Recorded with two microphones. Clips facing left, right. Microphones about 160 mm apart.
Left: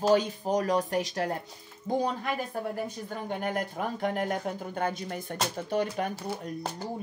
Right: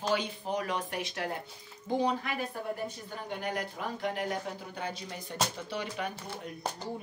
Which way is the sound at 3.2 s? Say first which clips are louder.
Left 3 dB; 50° left (ahead or behind).